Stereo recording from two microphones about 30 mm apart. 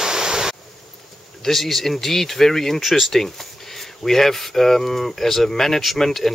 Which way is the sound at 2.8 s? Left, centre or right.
Centre.